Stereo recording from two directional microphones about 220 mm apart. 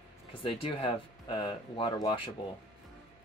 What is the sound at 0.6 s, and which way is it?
Speech, 25° left (ahead or behind).